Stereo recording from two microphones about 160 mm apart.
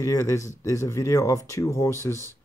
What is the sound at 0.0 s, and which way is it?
Speech, 20° left (ahead or behind).